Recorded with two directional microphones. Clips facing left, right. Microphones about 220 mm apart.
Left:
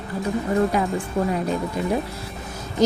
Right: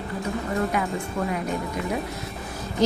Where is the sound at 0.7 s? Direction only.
30° left (ahead or behind).